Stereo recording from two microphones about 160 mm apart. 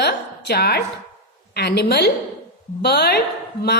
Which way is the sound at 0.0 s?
90° left.